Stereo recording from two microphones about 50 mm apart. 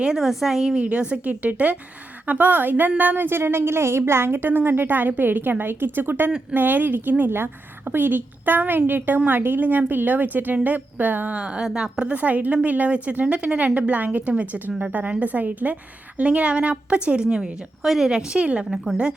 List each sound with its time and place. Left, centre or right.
0.0 s a woman's voice: centre
0.8 s a woman's voice: right
7.3 s a woman's voice: right
11.3 s a woman's voice: centre
12.0 s a woman's voice: right
17.8 s a woman's voice: centre
18.3 s a woman's voice: right
18.6 s a woman's voice: centre